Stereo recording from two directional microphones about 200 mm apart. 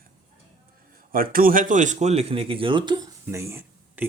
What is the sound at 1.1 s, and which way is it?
Speech, 45° right (ahead or behind).